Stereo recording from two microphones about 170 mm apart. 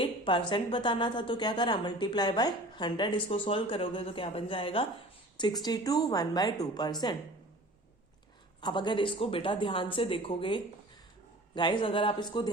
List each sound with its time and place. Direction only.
0.0 s a woman's voice: 30° left (ahead or behind)
8.6 s a woman's voice: 25° left (ahead or behind)